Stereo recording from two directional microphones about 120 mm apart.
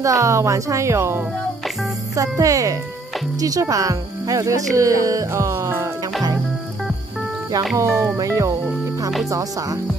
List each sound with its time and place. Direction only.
0.0 s speech: 25° right (ahead or behind)
7.7 s speech: 25° right (ahead or behind)